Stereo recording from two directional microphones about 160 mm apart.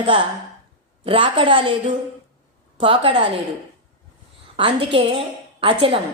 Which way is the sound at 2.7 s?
35° right (ahead or behind).